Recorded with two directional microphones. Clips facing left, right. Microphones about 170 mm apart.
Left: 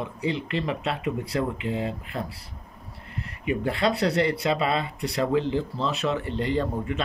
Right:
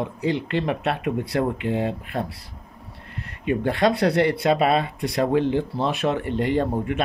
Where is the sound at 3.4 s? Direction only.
65° right (ahead or behind).